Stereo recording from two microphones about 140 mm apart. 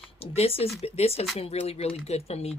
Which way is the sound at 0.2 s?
45° left (ahead or behind).